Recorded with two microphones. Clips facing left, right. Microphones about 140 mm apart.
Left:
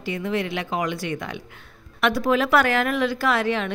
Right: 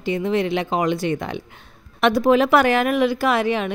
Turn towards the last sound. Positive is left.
turn(degrees=-15)  # may be behind; listen again after turning